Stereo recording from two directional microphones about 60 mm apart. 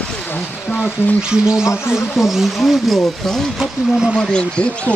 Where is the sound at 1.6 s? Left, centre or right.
Left.